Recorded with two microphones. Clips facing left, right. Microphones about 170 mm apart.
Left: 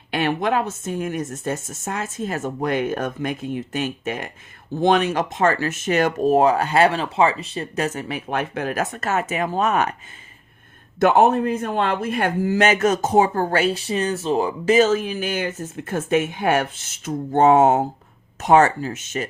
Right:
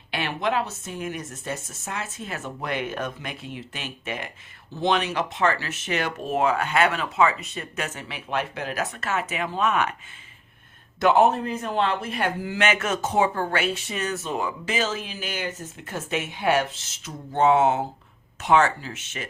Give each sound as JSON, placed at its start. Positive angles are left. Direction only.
{"t": 0.1, "sound": "a man's voice", "side_deg": 50}
{"t": 11.0, "sound": "a man's voice", "side_deg": 50}